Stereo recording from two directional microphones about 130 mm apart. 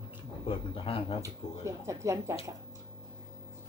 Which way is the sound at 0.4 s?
40° left (ahead or behind).